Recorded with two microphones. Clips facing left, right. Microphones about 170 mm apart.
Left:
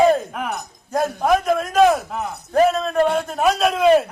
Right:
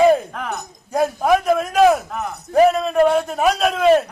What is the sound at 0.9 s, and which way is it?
A man's voice, 5° right (ahead or behind).